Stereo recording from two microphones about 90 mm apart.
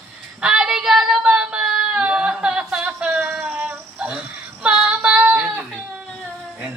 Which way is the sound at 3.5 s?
20° right (ahead or behind).